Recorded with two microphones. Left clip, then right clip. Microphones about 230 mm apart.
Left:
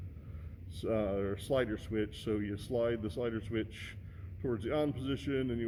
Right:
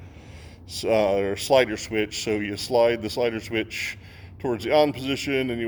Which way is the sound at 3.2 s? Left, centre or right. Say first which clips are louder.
Right 12 dB; right.